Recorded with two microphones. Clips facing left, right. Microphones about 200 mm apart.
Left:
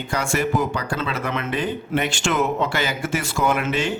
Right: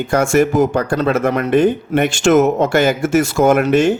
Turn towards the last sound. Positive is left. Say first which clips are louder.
# right 10 dB
turn(degrees=-45)  # may be behind; listen again after turning